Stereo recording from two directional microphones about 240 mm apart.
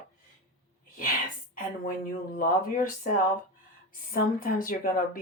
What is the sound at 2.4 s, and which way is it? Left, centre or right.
Speech, left.